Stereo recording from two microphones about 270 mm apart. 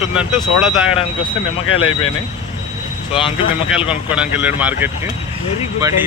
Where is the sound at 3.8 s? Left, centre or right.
Centre.